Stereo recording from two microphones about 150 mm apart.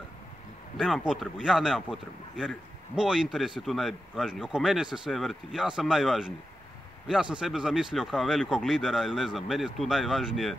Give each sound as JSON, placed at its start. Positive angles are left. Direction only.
{"t": 0.7, "sound": "speech", "side_deg": -5}